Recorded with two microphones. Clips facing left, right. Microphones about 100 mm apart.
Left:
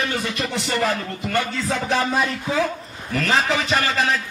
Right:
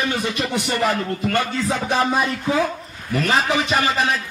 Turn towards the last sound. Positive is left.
turn(degrees=-15)  # may be behind; listen again after turning